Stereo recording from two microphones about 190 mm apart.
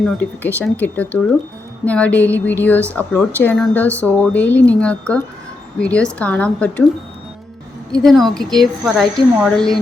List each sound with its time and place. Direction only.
0.0 s speech: 10° left (ahead or behind)
7.9 s speech: centre (ahead or behind)